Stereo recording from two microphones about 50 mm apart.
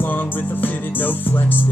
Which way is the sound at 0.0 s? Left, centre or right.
Left.